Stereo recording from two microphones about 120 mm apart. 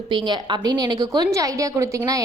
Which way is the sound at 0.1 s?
40° right (ahead or behind).